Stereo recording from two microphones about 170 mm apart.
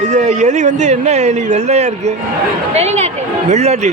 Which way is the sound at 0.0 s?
40° right (ahead or behind).